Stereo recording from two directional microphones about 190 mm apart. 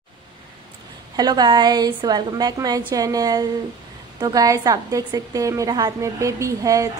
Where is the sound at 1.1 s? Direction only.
20° right (ahead or behind).